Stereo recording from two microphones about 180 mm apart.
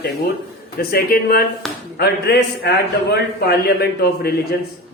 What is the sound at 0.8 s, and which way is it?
A man's voice, 55° left (ahead or behind).